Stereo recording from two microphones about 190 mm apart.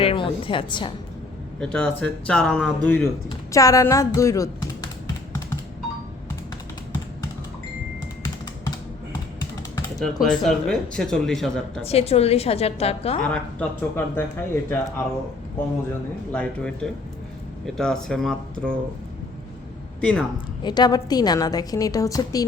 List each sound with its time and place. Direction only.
0.0 s a woman's voice: 30° left (ahead or behind)
1.6 s speech: 5° left (ahead or behind)
3.5 s speech: 15° left (ahead or behind)
10.2 s speech: centre (ahead or behind)
11.9 s a woman's voice: 35° left (ahead or behind)
13.2 s speech: 5° left (ahead or behind)
16.3 s speech: 5° left (ahead or behind)
20.0 s speech: 5° left (ahead or behind)
20.6 s a woman's voice: 20° left (ahead or behind)